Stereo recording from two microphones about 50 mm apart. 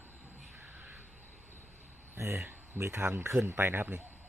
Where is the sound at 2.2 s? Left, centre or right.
Right.